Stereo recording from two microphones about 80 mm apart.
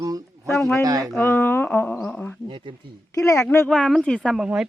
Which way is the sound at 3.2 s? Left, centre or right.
Left.